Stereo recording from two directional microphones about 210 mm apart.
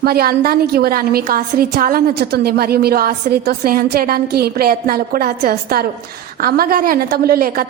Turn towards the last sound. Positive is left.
turn(degrees=-45)  # may be behind; listen again after turning